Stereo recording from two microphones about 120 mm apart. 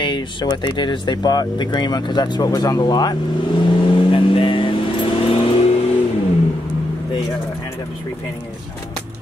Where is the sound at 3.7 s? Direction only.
50° left (ahead or behind).